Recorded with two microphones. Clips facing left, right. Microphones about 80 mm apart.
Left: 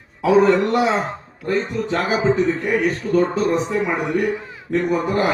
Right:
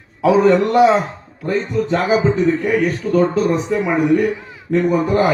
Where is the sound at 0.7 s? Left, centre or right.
Centre.